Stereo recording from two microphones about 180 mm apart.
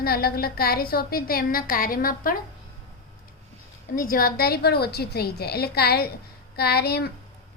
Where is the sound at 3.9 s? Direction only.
50° left (ahead or behind).